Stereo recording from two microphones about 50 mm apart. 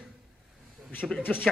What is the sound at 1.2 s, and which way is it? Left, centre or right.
Speech, left.